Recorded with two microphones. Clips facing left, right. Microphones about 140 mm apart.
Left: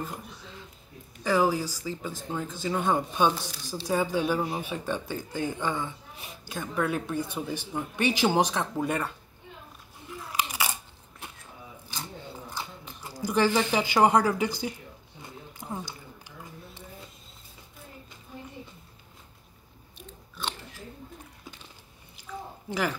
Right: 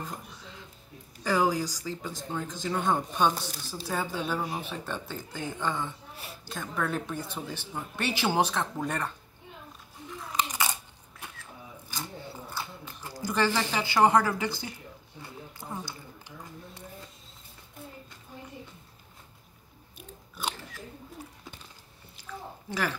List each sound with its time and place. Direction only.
1.2 s speech: 5° left (ahead or behind)
10.3 s biting: 10° left (ahead or behind)
12.4 s speech: 15° left (ahead or behind)
15.6 s a sound: 10° left (ahead or behind)
22.2 s chewing: 10° left (ahead or behind)